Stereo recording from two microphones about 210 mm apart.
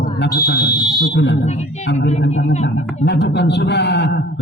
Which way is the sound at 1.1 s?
55° left (ahead or behind).